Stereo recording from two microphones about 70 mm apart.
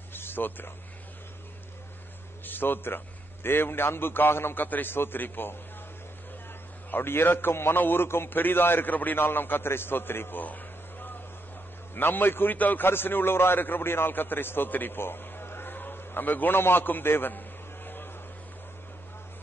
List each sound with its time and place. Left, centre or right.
0.1 s a sound: left
2.4 s a man's voice: left
6.9 s a man's voice: left